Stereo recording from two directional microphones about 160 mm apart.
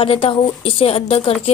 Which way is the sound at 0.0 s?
35° left (ahead or behind).